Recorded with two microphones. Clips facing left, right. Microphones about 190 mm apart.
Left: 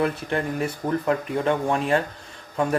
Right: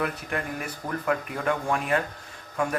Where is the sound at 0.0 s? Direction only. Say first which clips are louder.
Left 6 dB; 30° left (ahead or behind).